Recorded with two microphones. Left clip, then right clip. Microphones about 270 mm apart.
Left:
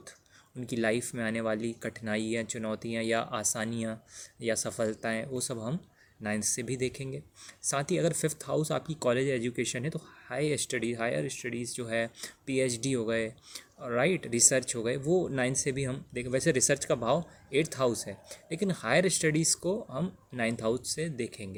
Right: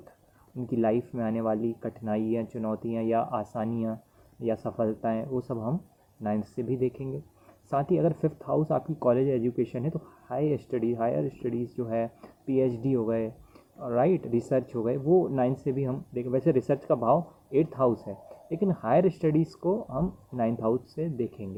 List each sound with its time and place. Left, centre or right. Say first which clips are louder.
0.7 s speech: right 3 dB; left